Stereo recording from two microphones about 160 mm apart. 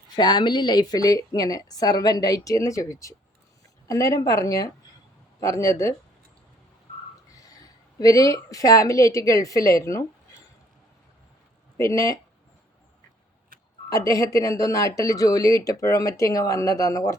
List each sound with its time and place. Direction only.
0.2 s a woman's voice: 25° left (ahead or behind)
7.3 s speech: 20° left (ahead or behind)
11.8 s a woman's voice: 20° left (ahead or behind)
13.9 s a woman's voice: 20° left (ahead or behind)